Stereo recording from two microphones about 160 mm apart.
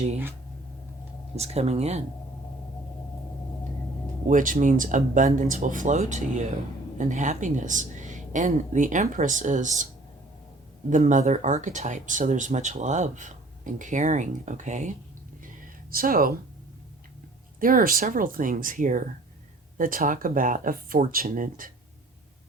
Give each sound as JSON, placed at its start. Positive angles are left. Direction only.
{"t": 1.4, "sound": "speech", "side_deg": -40}
{"t": 4.3, "sound": "speech", "side_deg": -55}
{"t": 10.8, "sound": "speech", "side_deg": -50}
{"t": 15.9, "sound": "speech", "side_deg": -65}
{"t": 17.6, "sound": "speech", "side_deg": -60}